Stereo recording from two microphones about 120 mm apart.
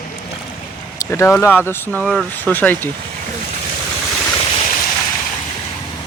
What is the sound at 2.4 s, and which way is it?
Speech, 15° left (ahead or behind).